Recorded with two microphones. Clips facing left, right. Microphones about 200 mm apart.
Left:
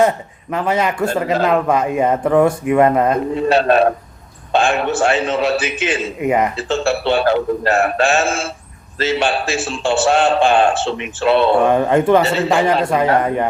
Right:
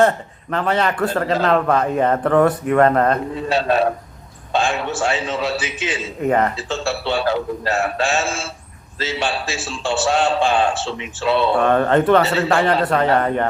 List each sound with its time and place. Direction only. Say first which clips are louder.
0.5 s speech: left 1 dB; 10° left (ahead or behind)
3.3 s a man's voice: left 5 dB; 60° left (ahead or behind)
6.1 s speech: even; 10° left (ahead or behind)
6.6 s a man's voice: left 6 dB; 60° left (ahead or behind)
11.6 s speech: left 2 dB; 10° left (ahead or behind)